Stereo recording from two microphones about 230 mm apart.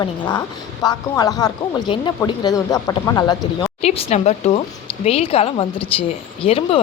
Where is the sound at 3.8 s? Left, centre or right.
Left.